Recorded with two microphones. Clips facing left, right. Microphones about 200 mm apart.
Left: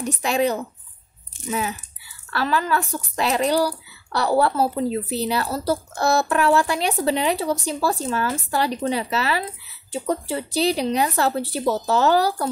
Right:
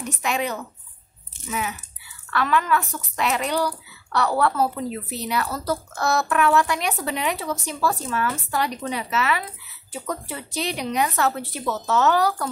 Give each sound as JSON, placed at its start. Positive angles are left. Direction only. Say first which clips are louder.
{"t": 0.0, "sound": "speech", "louder": "left 5 dB", "side_deg": 35}